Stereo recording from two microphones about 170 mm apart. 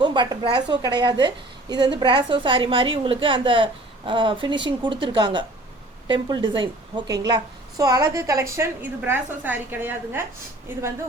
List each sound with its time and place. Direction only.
0.0 s a woman's voice: 25° right (ahead or behind)